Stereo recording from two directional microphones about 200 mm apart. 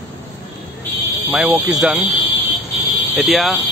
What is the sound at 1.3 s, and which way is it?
Speech, centre (ahead or behind).